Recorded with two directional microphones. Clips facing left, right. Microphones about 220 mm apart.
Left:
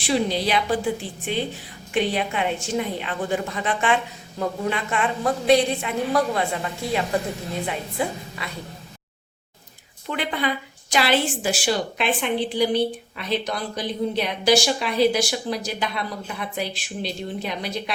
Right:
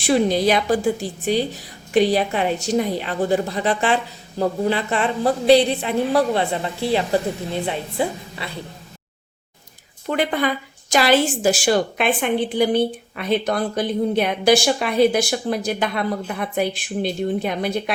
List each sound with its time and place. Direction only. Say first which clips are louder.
0.0 s a woman's voice: right 5 dB; 50° right (ahead or behind); by 8.5 s 30° right (ahead or behind)
10.1 s a woman's voice: right 5 dB; 45° right (ahead or behind)